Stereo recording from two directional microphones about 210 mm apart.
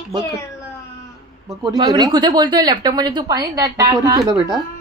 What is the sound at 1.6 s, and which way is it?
Speech, 20° right (ahead or behind).